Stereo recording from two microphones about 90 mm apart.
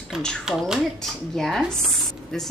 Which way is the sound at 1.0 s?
5° left (ahead or behind).